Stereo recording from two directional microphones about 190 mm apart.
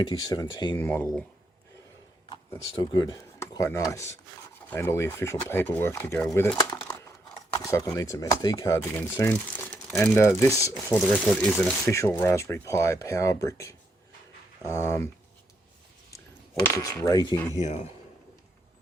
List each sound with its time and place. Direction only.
0.0 s speech: 20° left (ahead or behind)
0.8 s speech: 10° left (ahead or behind)
2.9 s speech: 20° left (ahead or behind)
10.9 s speech: centre (ahead or behind)
11.9 s speech: 15° left (ahead or behind)
16.7 s speech: 15° left (ahead or behind)
17.6 s speech: 35° left (ahead or behind)